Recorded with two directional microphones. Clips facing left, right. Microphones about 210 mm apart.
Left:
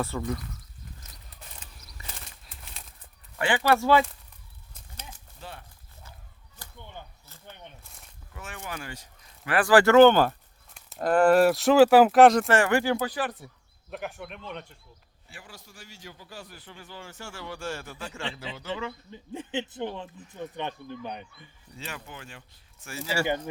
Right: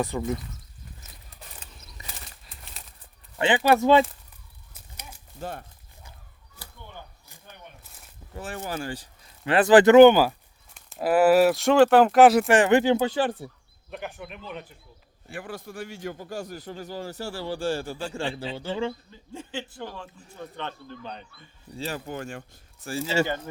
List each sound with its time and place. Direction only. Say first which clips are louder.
0.0 s speech: right 3 dB; 20° right (ahead or behind)
2.1 s bird flight: right 1 dB; centre (ahead or behind)
3.3 s speech: right 3 dB; 20° right (ahead or behind)
4.7 s a sound: even; 10° right (ahead or behind)
5.4 s speech: right 9 dB; 45° right (ahead or behind)
8.3 s a man's voice: right 6 dB; 35° right (ahead or behind); by 10.2 s 15° right (ahead or behind)
10.8 s speech: right 2 dB; centre (ahead or behind); by 13.5 s 30° right (ahead or behind)
13.9 s speech: even; centre (ahead or behind)
15.3 s a man's voice: right 13 dB; 55° right (ahead or behind); by 18.9 s 30° right (ahead or behind)
19.1 s speech: left 3 dB; 20° left (ahead or behind)
21.8 s a man's voice: right 9 dB; 35° right (ahead or behind)
22.9 s speech: right 5 dB; 25° right (ahead or behind)